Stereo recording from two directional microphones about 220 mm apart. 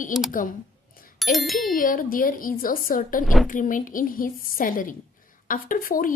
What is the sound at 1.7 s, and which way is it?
Speech, 40° left (ahead or behind).